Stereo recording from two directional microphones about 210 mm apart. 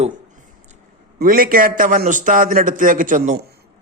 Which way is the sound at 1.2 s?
45° right (ahead or behind).